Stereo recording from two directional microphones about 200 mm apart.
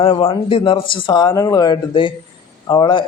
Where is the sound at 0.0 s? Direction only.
30° left (ahead or behind).